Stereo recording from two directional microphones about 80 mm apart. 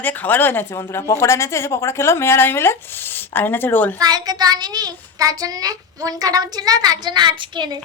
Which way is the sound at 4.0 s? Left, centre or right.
Right.